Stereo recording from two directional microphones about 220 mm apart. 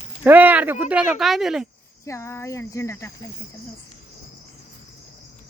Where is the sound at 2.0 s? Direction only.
15° left (ahead or behind).